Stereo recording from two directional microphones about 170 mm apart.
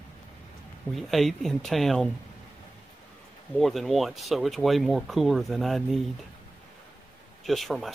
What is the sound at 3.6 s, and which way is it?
Speech, centre (ahead or behind).